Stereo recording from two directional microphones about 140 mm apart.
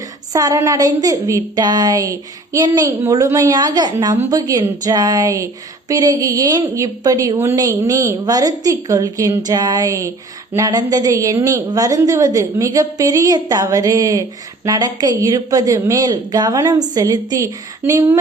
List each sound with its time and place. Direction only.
0.3 s a woman's voice: 25° right (ahead or behind)